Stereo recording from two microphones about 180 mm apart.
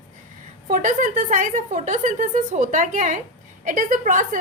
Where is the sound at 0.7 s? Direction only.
45° right (ahead or behind).